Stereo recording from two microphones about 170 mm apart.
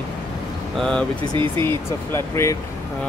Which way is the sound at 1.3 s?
30° right (ahead or behind).